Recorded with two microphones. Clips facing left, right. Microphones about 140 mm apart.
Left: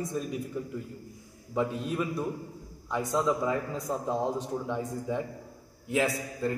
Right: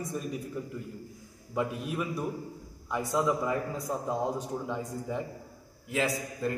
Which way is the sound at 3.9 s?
25° left (ahead or behind).